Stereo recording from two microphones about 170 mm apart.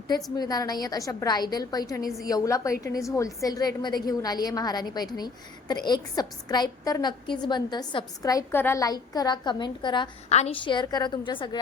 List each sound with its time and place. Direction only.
0.3 s a woman's voice: 20° left (ahead or behind)
10.2 s a woman's voice: 40° left (ahead or behind)